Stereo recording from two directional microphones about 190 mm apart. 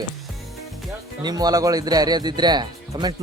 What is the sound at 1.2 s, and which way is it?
Speech, 20° right (ahead or behind).